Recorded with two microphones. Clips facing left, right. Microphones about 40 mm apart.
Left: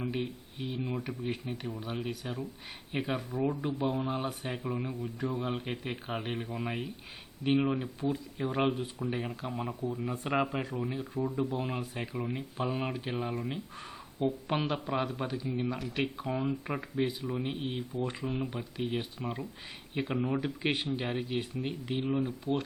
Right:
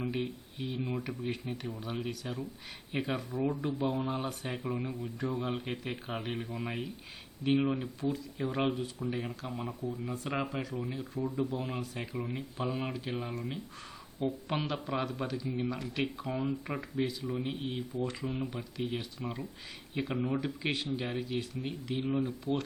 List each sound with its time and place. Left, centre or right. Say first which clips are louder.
0.0 s speech: even; centre
10.4 s speech: left 3 dB; left
10.8 s speech: left 2 dB; centre
18.8 s speech: left 2 dB; centre
20.6 s speech: left 2 dB; centre
22.1 s speech: left 1 dB; centre